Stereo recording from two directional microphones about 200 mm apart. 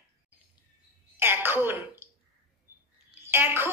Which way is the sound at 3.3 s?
10° right (ahead or behind).